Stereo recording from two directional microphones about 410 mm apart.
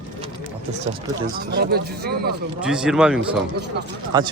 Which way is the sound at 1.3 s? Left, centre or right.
Right.